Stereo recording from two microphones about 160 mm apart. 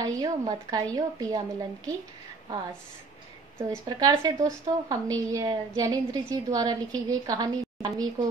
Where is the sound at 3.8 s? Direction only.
25° right (ahead or behind).